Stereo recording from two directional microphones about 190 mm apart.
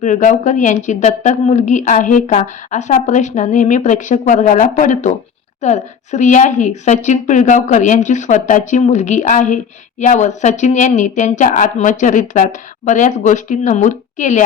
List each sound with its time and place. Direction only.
0.0 s speech: 40° left (ahead or behind)